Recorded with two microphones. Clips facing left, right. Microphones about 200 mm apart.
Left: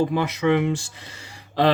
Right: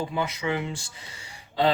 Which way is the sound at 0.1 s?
65° left (ahead or behind).